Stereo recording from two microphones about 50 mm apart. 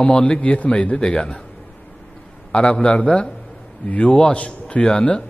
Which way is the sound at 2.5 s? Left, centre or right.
Left.